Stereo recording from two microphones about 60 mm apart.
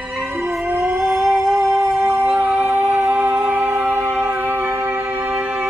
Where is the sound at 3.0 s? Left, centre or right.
Right.